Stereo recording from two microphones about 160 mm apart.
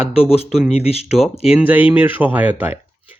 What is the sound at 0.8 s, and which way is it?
Speech, 40° left (ahead or behind).